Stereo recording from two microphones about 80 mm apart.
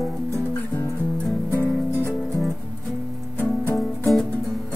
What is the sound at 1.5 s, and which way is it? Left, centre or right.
Music, left.